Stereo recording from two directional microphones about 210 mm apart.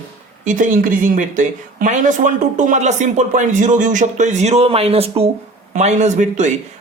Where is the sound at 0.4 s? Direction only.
40° right (ahead or behind).